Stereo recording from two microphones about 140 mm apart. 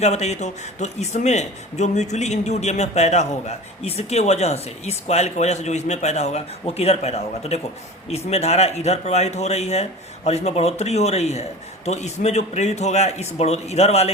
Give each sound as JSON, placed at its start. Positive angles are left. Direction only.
{"t": 0.0, "sound": "speech", "side_deg": 50}